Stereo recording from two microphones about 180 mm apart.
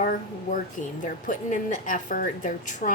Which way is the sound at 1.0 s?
45° left (ahead or behind).